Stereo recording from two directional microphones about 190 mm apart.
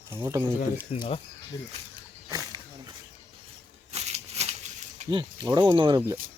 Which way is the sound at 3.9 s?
35° right (ahead or behind).